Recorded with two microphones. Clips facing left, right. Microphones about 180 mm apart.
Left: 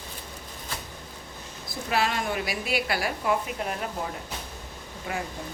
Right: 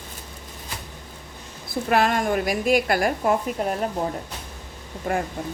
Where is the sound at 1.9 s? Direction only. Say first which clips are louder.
Right 6 dB; 50° right (ahead or behind).